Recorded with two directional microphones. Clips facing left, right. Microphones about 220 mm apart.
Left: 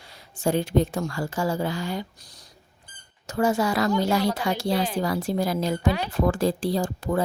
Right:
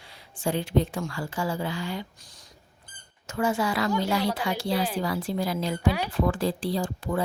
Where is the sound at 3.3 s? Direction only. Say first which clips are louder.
Left 3 dB; 40° left (ahead or behind).